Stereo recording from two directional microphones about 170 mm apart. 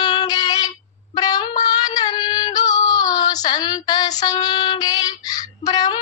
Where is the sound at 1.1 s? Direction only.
25° left (ahead or behind).